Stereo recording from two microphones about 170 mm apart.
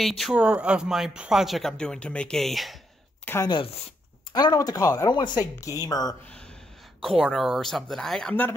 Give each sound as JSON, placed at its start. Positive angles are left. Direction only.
{"t": 0.0, "sound": "speech", "side_deg": 0}
{"t": 3.4, "sound": "speech", "side_deg": 30}
{"t": 7.0, "sound": "speech", "side_deg": 0}